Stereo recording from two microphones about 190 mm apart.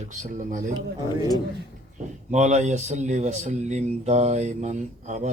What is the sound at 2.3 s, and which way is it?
Speech, 40° right (ahead or behind).